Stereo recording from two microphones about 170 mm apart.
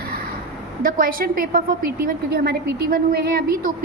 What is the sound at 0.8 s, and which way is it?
A woman's voice, 55° right (ahead or behind).